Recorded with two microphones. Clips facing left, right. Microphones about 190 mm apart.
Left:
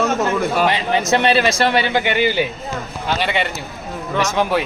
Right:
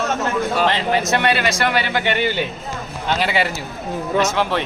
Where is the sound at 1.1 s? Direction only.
25° left (ahead or behind).